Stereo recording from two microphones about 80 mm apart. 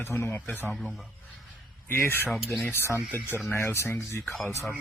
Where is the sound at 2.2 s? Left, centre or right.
Centre.